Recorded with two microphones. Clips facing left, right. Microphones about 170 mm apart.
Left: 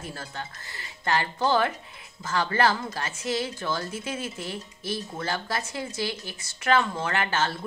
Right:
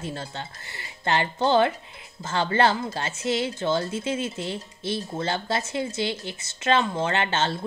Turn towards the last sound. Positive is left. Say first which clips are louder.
# right 2 dB
turn(degrees=-25)  # may be behind; listen again after turning